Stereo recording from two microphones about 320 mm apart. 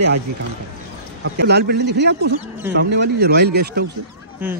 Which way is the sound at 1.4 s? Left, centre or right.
Right.